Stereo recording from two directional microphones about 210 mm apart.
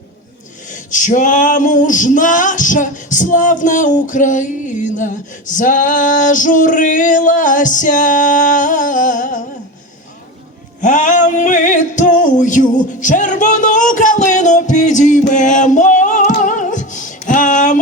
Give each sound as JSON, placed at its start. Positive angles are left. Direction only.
{"t": 0.7, "sound": "male singing", "side_deg": 35}
{"t": 10.8, "sound": "a sound", "side_deg": 35}
{"t": 15.3, "sound": "singing", "side_deg": 35}